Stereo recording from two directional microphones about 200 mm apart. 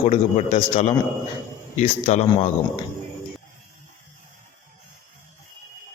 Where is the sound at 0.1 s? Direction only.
35° left (ahead or behind).